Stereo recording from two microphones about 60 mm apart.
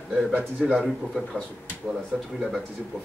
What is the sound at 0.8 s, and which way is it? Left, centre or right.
Speech, centre.